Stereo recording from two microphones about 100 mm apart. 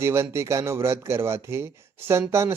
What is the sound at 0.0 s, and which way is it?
Speech, 25° right (ahead or behind).